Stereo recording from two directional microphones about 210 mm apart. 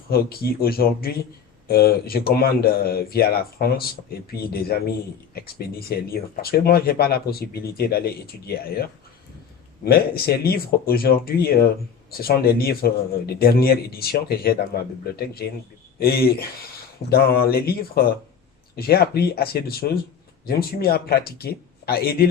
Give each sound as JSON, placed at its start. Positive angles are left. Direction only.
{"t": 0.1, "sound": "speech", "side_deg": 45}
{"t": 9.8, "sound": "speech", "side_deg": 45}